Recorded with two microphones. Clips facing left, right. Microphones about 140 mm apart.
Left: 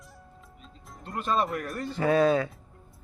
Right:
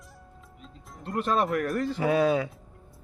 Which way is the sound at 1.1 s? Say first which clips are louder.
Right 2 dB; 75° right (ahead or behind).